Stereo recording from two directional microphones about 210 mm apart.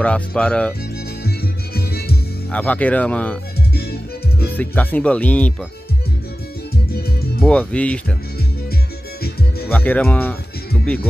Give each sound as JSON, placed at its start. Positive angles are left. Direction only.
{"t": 0.0, "sound": "speech", "side_deg": 5}
{"t": 1.2, "sound": "music", "side_deg": 50}
{"t": 2.5, "sound": "speech", "side_deg": 5}
{"t": 3.7, "sound": "music", "side_deg": 50}
{"t": 4.6, "sound": "speech", "side_deg": 10}
{"t": 7.4, "sound": "speech", "side_deg": 5}
{"t": 9.2, "sound": "music", "side_deg": 50}
{"t": 9.7, "sound": "speech", "side_deg": 10}